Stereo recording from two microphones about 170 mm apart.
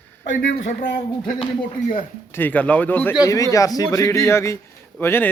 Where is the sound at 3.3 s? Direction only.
20° left (ahead or behind).